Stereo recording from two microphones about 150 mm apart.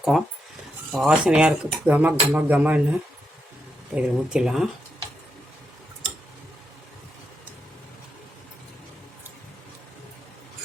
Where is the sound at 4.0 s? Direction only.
5° right (ahead or behind).